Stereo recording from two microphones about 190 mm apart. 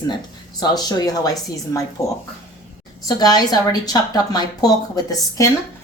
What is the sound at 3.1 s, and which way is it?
A woman's voice, 20° left (ahead or behind).